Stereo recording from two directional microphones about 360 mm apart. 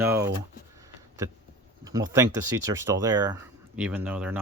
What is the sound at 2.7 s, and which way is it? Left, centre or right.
Speech, centre.